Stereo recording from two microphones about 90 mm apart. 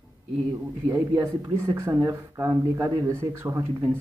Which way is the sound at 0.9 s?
35° right (ahead or behind).